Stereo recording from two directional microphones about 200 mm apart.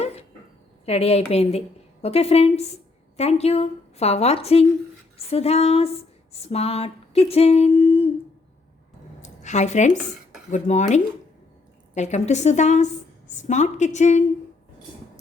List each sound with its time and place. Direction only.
0.0 s a sound: 30° left (ahead or behind)
0.9 s a woman's voice: 30° left (ahead or behind)
9.2 s a woman's voice: 35° left (ahead or behind)